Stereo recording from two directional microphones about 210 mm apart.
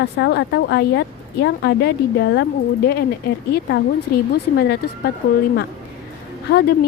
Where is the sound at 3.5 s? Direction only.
50° left (ahead or behind).